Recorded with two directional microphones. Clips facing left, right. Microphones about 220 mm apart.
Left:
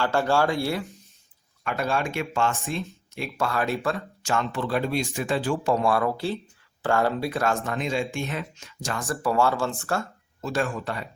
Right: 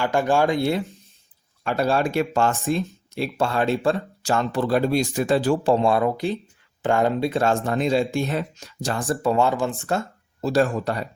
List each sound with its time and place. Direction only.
0.0 s speech: 15° right (ahead or behind)
1.6 s speech: 35° right (ahead or behind)
5.7 s speech: 25° right (ahead or behind)
9.2 s speech: 20° right (ahead or behind)
10.4 s speech: 35° right (ahead or behind)